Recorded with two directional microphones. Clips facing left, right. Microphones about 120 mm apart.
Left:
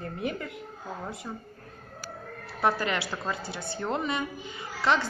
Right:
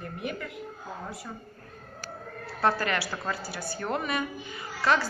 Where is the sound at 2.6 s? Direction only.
20° left (ahead or behind).